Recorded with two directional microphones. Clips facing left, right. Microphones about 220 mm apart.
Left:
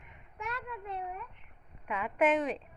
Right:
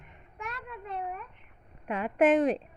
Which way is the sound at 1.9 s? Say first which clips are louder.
Right 5 dB; 40° right (ahead or behind).